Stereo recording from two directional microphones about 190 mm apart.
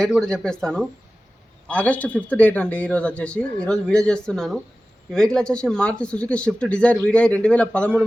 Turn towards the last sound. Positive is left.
turn(degrees=5)  # may be behind; listen again after turning